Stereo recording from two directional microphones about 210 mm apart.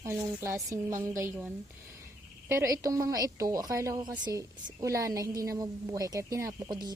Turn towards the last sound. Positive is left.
turn(degrees=-20)  # may be behind; listen again after turning